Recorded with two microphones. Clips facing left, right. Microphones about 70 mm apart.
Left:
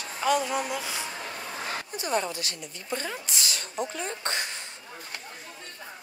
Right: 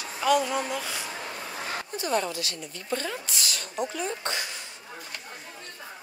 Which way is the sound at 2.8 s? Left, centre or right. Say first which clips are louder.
Right 2 dB; centre.